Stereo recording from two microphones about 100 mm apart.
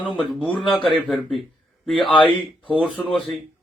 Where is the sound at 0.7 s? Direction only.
5° left (ahead or behind).